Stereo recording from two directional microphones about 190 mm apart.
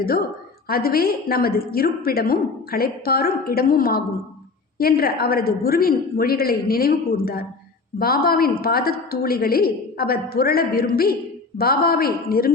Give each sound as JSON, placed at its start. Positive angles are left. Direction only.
{"t": 0.7, "sound": "a woman's voice", "side_deg": 50}